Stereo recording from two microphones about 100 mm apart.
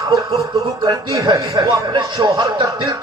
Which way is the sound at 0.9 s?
40° right (ahead or behind).